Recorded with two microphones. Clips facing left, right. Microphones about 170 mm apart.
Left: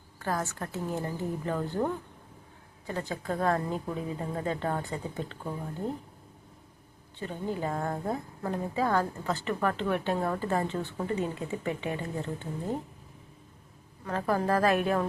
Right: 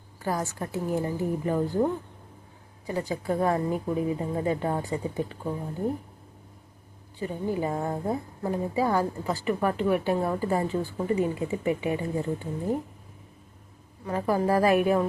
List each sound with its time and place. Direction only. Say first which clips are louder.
0.2 s a woman's voice: right 3 dB; 15° right (ahead or behind)
7.2 s a woman's voice: right 4 dB; 10° right (ahead or behind)
14.0 s a woman's voice: right 3 dB; 10° right (ahead or behind)